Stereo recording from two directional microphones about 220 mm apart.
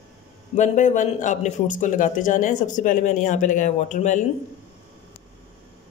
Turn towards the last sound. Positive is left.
turn(degrees=35)  # may be behind; listen again after turning